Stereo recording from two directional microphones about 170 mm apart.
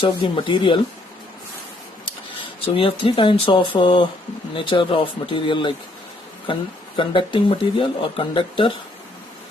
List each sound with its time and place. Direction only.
0.0 s speech: 30° left (ahead or behind)
2.7 s speech: 30° left (ahead or behind)